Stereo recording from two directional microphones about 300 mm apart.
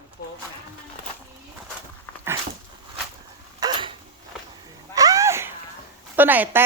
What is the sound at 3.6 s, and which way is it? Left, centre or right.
Dog, centre.